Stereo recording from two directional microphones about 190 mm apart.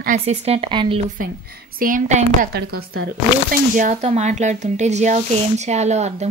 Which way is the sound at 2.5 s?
70° right (ahead or behind).